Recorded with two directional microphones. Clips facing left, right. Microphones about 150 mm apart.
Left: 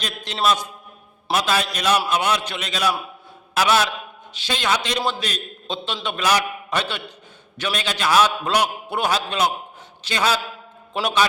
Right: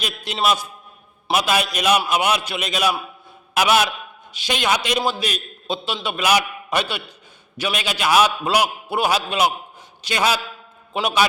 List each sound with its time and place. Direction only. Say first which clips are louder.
0.0 s a man's voice: even; 10° right (ahead or behind)